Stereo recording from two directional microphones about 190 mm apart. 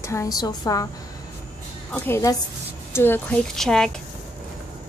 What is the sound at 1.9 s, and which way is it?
Speech, 10° left (ahead or behind).